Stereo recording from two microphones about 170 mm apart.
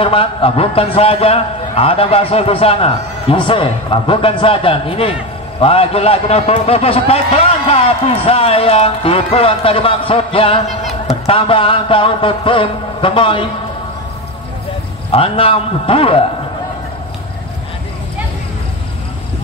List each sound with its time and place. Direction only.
0.0 s a man's voice: 30° left (ahead or behind)
15.0 s a man's voice: 35° left (ahead or behind)